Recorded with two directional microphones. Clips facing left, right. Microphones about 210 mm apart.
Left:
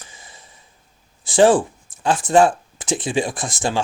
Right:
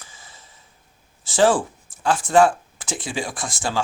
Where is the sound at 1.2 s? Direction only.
15° left (ahead or behind).